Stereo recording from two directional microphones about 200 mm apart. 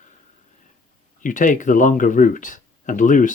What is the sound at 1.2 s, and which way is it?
Speech, 40° left (ahead or behind).